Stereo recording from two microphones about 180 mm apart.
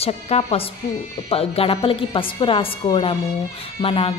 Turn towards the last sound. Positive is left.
turn(degrees=30)  # may be behind; listen again after turning